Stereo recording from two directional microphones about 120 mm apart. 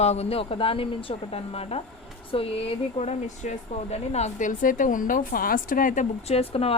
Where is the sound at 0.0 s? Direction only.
60° left (ahead or behind).